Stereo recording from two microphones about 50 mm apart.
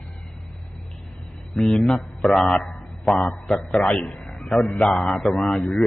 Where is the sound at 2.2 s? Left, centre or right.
Centre.